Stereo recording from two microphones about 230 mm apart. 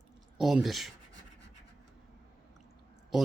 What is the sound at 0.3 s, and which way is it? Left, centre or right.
Speech, centre.